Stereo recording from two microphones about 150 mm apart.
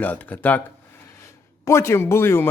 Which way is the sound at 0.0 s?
10° left (ahead or behind).